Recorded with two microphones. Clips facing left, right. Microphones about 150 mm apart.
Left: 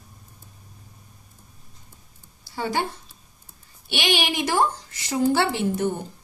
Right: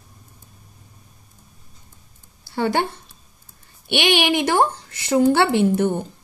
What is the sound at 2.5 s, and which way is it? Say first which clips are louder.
Speech: right 5 dB; 60° right (ahead or behind).